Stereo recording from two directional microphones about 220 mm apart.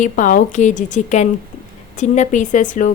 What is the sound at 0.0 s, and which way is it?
Speech, 35° left (ahead or behind).